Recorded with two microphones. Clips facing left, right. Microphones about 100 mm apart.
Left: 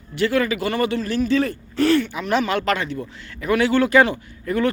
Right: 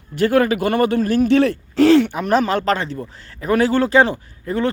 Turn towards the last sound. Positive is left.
turn(degrees=-30)  # may be behind; listen again after turning